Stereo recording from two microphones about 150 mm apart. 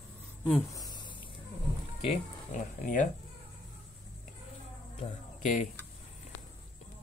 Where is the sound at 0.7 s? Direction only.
25° left (ahead or behind).